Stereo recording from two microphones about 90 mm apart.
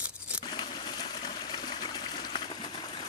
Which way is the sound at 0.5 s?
60° left (ahead or behind).